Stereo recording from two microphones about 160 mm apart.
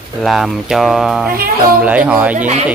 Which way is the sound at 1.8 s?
10° right (ahead or behind).